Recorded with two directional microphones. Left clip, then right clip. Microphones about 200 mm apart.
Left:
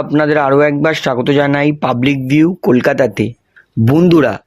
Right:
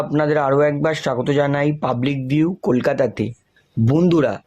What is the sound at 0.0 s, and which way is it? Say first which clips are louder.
Speech: left 6 dB; 35° left (ahead or behind).